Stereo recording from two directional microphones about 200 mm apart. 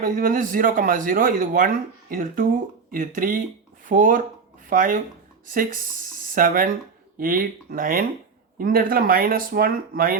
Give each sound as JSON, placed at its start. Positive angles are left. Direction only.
{"t": 0.0, "sound": "speech", "side_deg": -45}